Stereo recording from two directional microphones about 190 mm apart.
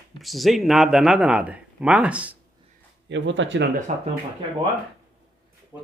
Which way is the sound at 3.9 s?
40° right (ahead or behind).